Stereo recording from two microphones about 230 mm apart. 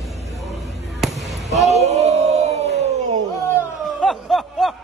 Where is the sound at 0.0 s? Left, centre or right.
Centre.